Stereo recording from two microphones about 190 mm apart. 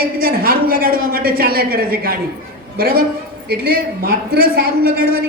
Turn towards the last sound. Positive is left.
turn(degrees=-50)  # may be behind; listen again after turning